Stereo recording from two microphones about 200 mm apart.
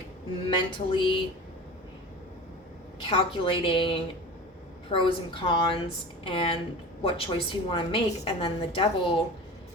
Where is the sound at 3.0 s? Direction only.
25° left (ahead or behind).